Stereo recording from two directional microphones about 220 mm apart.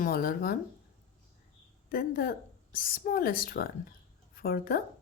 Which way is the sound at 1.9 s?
40° left (ahead or behind).